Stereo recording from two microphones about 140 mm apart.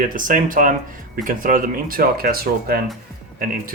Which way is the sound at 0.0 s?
75° right (ahead or behind).